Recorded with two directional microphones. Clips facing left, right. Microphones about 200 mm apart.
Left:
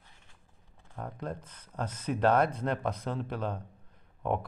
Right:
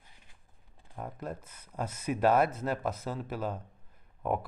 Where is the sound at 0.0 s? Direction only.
15° right (ahead or behind).